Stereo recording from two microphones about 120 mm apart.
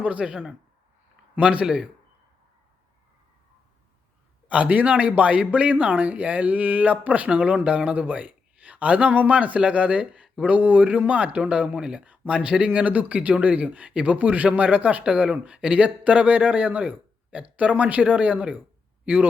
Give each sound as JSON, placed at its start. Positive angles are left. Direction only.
{"t": 0.0, "sound": "speech", "side_deg": -10}
{"t": 1.4, "sound": "speech", "side_deg": -10}
{"t": 4.4, "sound": "speech", "side_deg": -10}